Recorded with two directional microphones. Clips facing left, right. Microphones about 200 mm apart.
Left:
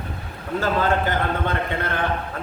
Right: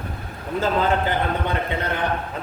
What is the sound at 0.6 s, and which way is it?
Speech, 20° right (ahead or behind).